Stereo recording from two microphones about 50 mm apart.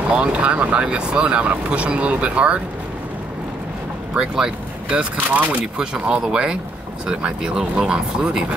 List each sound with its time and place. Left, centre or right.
0.1 s speech: right
4.1 s speech: centre
4.8 s speech: right
5.8 s speech: centre